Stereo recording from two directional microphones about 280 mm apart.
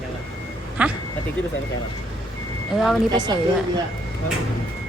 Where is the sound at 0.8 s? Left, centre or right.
Centre.